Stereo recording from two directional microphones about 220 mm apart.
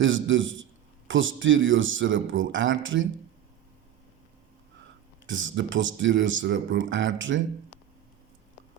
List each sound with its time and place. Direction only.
0.0 s a man's voice: 60° right (ahead or behind)
5.2 s a man's voice: 60° right (ahead or behind)